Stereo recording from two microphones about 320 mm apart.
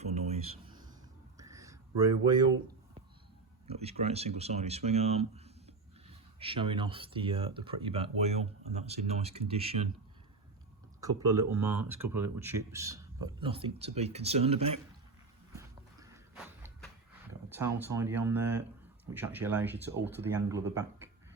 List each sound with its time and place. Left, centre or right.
0.0 s a sound: centre
3.7 s speech: centre
11.0 s speech: centre
15.5 s walk: centre
17.5 s speech: centre